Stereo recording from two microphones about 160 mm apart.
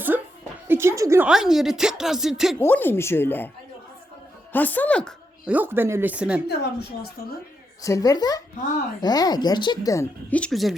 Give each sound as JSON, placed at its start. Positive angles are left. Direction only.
{"t": 0.7, "sound": "a woman's voice", "side_deg": -15}
{"t": 1.3, "sound": "speech", "side_deg": -5}
{"t": 2.6, "sound": "speech", "side_deg": 10}
{"t": 4.5, "sound": "speech", "side_deg": 10}
{"t": 5.5, "sound": "speech", "side_deg": -10}
{"t": 6.5, "sound": "speech", "side_deg": 90}
{"t": 7.8, "sound": "speech", "side_deg": 20}